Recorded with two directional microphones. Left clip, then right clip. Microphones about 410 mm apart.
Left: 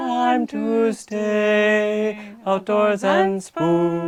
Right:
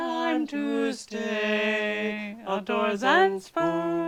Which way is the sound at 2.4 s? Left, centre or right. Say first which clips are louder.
Left 9 dB; left.